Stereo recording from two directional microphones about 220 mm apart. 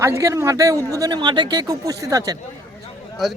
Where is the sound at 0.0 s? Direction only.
15° right (ahead or behind).